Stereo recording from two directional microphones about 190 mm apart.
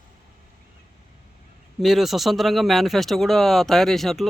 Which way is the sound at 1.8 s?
Centre (ahead or behind).